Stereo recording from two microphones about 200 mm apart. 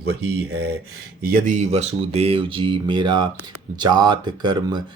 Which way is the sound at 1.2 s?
45° right (ahead or behind).